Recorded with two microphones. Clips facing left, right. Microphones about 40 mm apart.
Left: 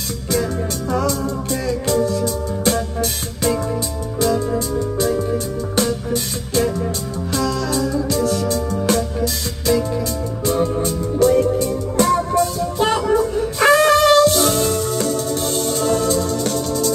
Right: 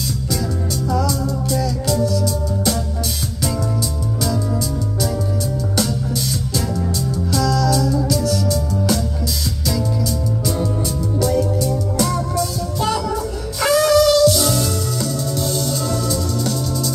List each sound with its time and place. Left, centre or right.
0.3 s music: left
6.5 s music: left
10.4 s music: left